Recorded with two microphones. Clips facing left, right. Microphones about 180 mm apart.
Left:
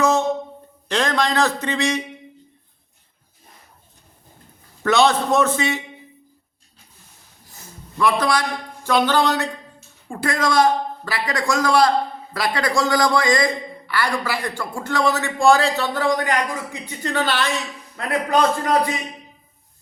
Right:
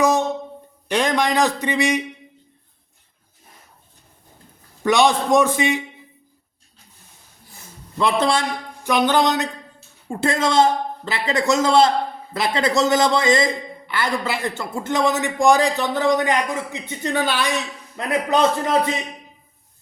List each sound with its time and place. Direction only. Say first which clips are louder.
0.0 s a sound: right 1 dB; 15° right (ahead or behind)
0.9 s speech: right 1 dB; 15° right (ahead or behind)
4.8 s speech: even; 15° right (ahead or behind)
7.9 s a man's voice: even; 25° right (ahead or behind)